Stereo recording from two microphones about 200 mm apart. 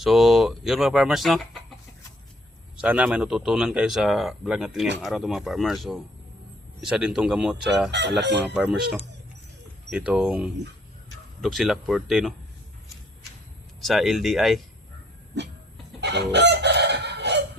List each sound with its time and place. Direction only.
0.0 s speech: centre (ahead or behind)
2.8 s speech: 5° right (ahead or behind)
7.9 s speech: 60° right (ahead or behind)
8.5 s speech: 5° right (ahead or behind)
13.8 s speech: centre (ahead or behind)
16.0 s chicken: 60° right (ahead or behind)